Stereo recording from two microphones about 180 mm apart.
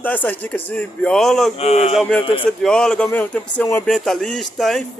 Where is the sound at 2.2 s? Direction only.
30° left (ahead or behind).